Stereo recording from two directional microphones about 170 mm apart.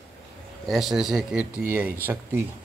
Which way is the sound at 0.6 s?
Centre (ahead or behind).